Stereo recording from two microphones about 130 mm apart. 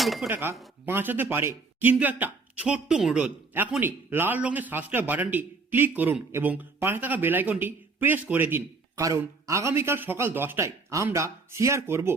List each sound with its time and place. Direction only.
0.0 s speech: centre (ahead or behind)
0.3 s speech: 15° right (ahead or behind)